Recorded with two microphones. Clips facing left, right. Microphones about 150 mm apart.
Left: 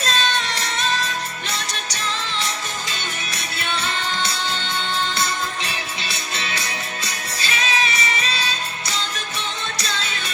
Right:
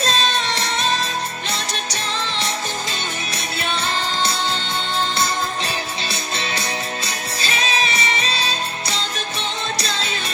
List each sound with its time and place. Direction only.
0.0 s music: 30° right (ahead or behind)